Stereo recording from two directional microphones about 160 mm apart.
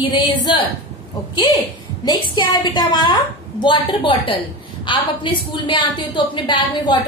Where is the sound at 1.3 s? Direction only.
25° left (ahead or behind).